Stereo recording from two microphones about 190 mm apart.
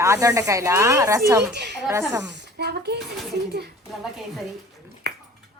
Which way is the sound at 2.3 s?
60° right (ahead or behind).